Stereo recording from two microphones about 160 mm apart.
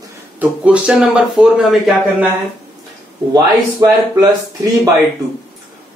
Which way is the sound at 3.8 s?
25° right (ahead or behind).